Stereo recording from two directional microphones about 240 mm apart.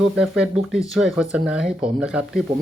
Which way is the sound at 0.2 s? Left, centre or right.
Centre.